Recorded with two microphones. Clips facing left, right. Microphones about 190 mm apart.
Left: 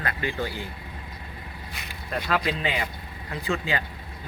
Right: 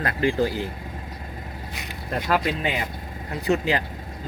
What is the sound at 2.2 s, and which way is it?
Speech, 50° right (ahead or behind).